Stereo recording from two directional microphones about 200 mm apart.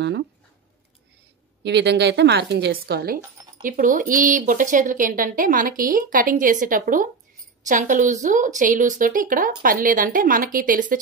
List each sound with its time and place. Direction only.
1.6 s a woman's voice: 60° right (ahead or behind); by 11.0 s 45° right (ahead or behind)